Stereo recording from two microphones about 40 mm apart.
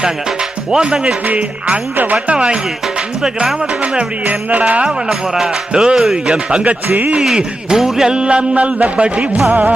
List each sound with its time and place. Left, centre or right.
0.7 s music: centre
1.3 s music: right
4.3 s music: right
4.9 s music: right
6.0 s a man's voice: centre
6.3 s music: right
6.7 s music: right
7.3 s music: centre
9.5 s music: right